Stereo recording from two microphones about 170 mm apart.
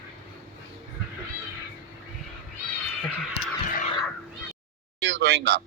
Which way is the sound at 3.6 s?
50° left (ahead or behind).